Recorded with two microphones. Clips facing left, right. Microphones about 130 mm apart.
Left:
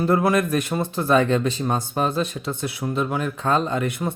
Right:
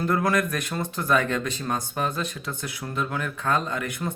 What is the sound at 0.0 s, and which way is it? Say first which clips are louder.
Speech: left 4 dB; 25° left (ahead or behind).